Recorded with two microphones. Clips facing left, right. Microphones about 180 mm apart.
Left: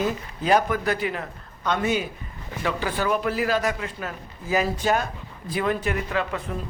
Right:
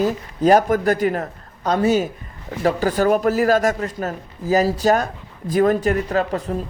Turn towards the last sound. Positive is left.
turn(degrees=-40)  # may be behind; listen again after turning